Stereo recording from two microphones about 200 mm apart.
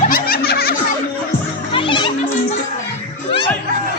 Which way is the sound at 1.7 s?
25° left (ahead or behind).